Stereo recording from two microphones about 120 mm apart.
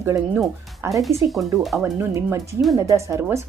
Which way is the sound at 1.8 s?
20° right (ahead or behind).